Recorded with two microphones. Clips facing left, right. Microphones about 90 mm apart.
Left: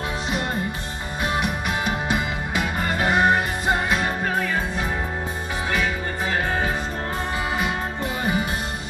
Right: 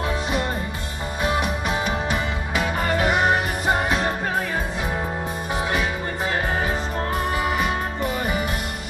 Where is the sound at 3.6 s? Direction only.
25° right (ahead or behind).